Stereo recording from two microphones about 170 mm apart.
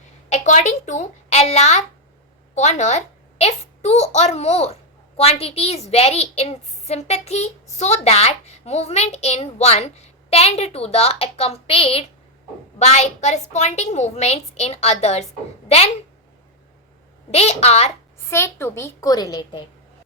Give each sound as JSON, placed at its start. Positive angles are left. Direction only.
{"t": 0.3, "sound": "a child's voice", "side_deg": 45}
{"t": 17.3, "sound": "a child's voice", "side_deg": 40}
{"t": 18.3, "sound": "a child's voice", "side_deg": 15}